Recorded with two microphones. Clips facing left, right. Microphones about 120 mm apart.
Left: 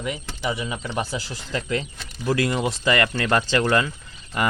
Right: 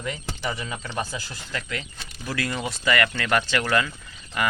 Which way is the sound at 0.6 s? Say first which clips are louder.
Left 3 dB; 15° left (ahead or behind).